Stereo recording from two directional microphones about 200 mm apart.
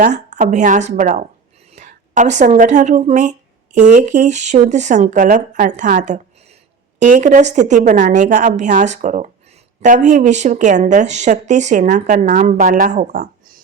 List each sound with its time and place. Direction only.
0.0 s a woman's voice: 35° right (ahead or behind)